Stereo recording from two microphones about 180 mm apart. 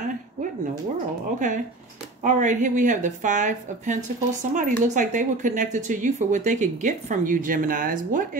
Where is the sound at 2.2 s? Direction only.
45° right (ahead or behind).